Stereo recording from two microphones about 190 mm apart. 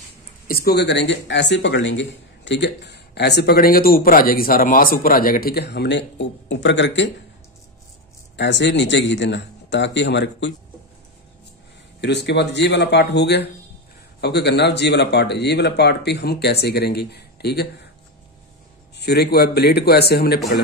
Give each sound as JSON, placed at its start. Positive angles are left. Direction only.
{"t": 0.5, "sound": "speech", "side_deg": 55}
{"t": 8.4, "sound": "speech", "side_deg": 70}
{"t": 12.0, "sound": "speech", "side_deg": 65}
{"t": 18.9, "sound": "speech", "side_deg": 55}